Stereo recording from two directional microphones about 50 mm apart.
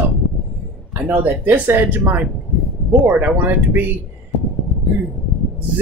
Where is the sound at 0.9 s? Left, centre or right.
Right.